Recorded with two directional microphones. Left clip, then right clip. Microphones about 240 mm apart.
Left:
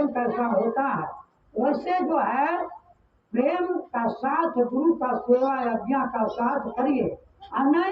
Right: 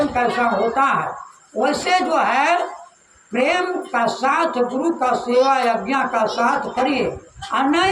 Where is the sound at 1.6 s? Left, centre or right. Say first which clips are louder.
Right 6 dB; right.